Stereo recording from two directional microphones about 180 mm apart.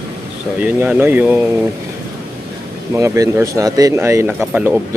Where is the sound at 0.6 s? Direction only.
10° right (ahead or behind).